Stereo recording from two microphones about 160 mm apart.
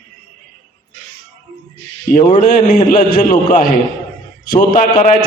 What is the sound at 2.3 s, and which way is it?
A man's voice, 55° left (ahead or behind).